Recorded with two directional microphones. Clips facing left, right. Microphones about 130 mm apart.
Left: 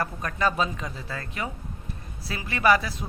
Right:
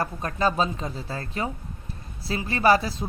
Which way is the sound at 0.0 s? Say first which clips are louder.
Right 2 dB; 25° right (ahead or behind).